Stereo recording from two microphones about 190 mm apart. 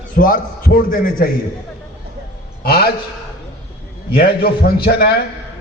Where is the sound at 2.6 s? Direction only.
55° left (ahead or behind).